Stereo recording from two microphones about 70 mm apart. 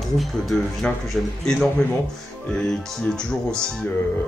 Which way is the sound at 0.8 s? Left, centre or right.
Centre.